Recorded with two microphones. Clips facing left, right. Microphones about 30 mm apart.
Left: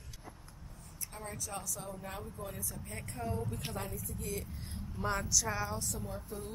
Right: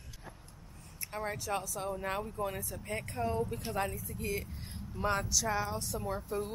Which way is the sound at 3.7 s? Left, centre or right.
Right.